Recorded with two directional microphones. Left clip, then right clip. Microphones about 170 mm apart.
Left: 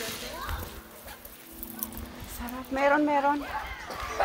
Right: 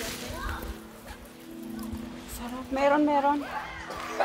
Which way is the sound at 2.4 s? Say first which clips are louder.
Even; 5° left (ahead or behind).